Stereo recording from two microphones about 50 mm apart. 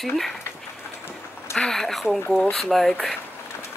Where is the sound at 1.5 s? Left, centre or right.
Centre.